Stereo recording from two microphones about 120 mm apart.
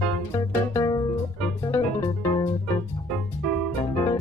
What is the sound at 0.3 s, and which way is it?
Music, 30° left (ahead or behind).